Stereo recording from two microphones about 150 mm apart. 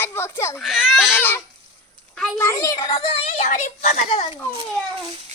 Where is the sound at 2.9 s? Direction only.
35° left (ahead or behind).